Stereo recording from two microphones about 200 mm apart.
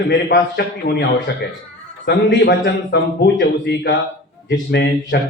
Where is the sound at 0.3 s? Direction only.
55° left (ahead or behind).